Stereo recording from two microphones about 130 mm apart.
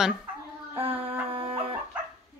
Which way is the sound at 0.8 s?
50° right (ahead or behind).